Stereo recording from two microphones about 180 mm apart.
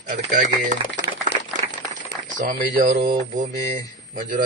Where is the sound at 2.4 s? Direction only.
40° right (ahead or behind).